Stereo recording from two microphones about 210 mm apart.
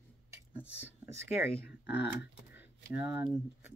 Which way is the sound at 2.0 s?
50° left (ahead or behind).